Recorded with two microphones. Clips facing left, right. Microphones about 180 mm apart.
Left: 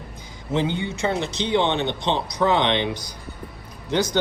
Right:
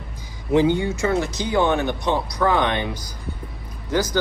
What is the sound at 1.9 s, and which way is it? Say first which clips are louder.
Speech: right 2 dB; 25° left (ahead or behind).